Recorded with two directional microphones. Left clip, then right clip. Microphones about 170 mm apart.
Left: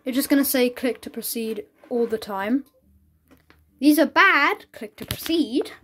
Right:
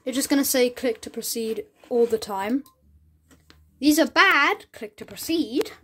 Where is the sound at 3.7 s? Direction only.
5° left (ahead or behind).